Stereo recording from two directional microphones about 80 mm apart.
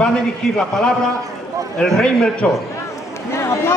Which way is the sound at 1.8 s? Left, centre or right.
Centre.